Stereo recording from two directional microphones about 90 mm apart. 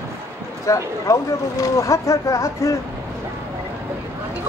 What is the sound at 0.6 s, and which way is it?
Speech, 40° left (ahead or behind).